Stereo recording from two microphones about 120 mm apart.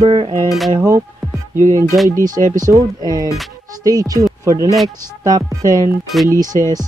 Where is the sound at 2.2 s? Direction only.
90° right.